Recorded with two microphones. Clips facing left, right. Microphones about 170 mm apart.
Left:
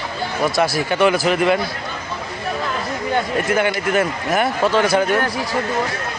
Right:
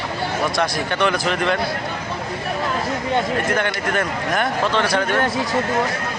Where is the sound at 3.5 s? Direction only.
5° left (ahead or behind).